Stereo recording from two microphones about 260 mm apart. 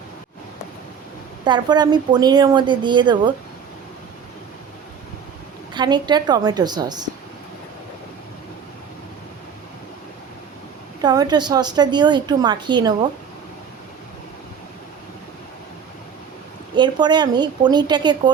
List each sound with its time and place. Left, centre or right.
1.5 s a woman's voice: centre
5.7 s a woman's voice: centre
11.0 s a woman's voice: centre
16.7 s a woman's voice: centre